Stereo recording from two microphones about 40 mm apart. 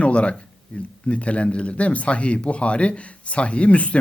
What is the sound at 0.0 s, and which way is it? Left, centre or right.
Speech, left.